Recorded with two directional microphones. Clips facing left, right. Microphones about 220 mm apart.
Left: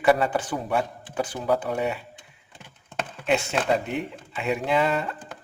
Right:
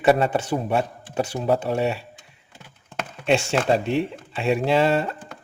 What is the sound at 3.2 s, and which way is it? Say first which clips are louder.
Speech: right 3 dB; 30° right (ahead or behind).